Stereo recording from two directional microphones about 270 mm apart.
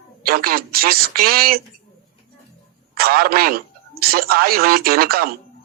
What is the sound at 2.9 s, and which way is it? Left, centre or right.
Speech, right.